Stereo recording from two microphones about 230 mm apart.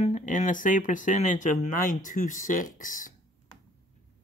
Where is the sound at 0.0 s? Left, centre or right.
Left.